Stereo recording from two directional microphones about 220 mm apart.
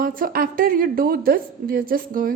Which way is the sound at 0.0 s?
40° right (ahead or behind).